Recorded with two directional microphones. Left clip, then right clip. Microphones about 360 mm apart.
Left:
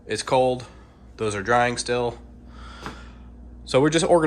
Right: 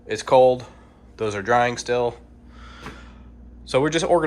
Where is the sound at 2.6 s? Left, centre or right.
Centre.